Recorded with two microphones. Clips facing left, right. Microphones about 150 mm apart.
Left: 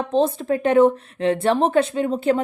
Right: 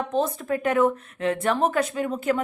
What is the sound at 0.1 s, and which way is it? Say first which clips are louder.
A woman's voice: left 7 dB; 30° left (ahead or behind).